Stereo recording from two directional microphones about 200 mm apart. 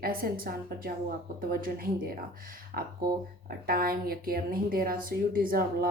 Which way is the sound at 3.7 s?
50° right (ahead or behind).